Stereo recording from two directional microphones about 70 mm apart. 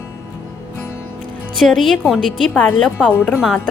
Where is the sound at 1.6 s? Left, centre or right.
Centre.